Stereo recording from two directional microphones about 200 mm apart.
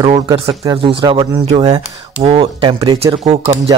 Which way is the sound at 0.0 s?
25° right (ahead or behind).